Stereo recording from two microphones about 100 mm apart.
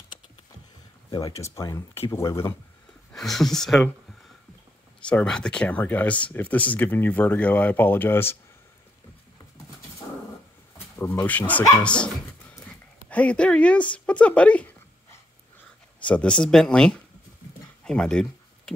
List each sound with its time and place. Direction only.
1.1 s speech: 35° left (ahead or behind)
3.1 s speech: 5° left (ahead or behind)
5.0 s speech: 10° left (ahead or behind)
11.0 s speech: 20° left (ahead or behind)
11.8 s a sound: 10° left (ahead or behind)
13.9 s speech: 10° left (ahead or behind)
16.0 s speech: 10° left (ahead or behind)